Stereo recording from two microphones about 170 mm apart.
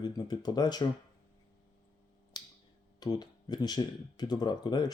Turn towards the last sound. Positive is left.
turn(degrees=25)  # may be behind; listen again after turning